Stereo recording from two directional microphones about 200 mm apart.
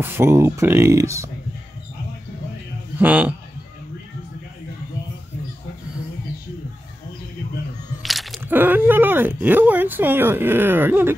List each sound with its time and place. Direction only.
0.0 s speech: 10° right (ahead or behind)
3.0 s speech: 10° right (ahead or behind)
8.0 s speech: centre (ahead or behind)